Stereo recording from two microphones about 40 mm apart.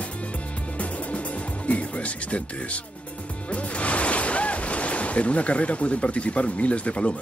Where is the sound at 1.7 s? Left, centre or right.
Left.